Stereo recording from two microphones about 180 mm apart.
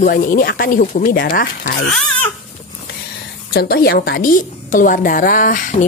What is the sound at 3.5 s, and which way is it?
A woman's voice, 60° left (ahead or behind).